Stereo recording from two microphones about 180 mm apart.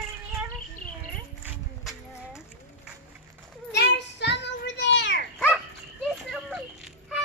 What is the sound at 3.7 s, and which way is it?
Children playing, 70° left (ahead or behind).